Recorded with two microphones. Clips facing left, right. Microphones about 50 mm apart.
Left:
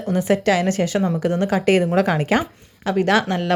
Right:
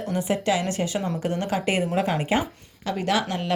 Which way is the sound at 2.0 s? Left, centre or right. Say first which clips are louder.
Left 5 dB; left.